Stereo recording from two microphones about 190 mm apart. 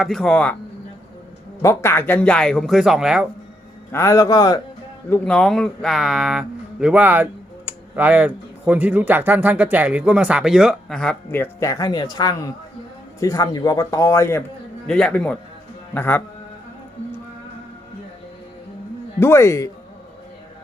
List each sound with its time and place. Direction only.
0.0 s speech: centre (ahead or behind)
1.6 s speech: 15° left (ahead or behind); by 3.2 s 5° right (ahead or behind)
3.9 s a man's voice: 15° left (ahead or behind)
5.0 s a man's voice: 5° left (ahead or behind)
19.2 s a man's voice: 15° left (ahead or behind)